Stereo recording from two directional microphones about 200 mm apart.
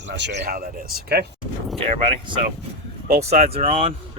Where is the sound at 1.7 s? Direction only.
30° right (ahead or behind).